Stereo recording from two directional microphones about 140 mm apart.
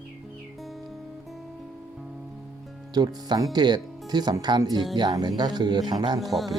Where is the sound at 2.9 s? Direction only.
30° right (ahead or behind).